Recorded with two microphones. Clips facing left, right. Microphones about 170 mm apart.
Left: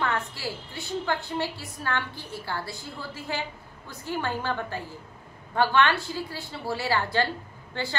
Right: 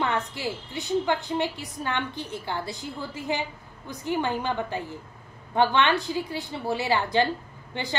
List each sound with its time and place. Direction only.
0.0 s a woman's voice: 20° right (ahead or behind)